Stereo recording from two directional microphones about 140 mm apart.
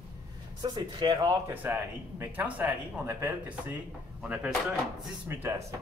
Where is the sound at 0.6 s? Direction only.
30° right (ahead or behind).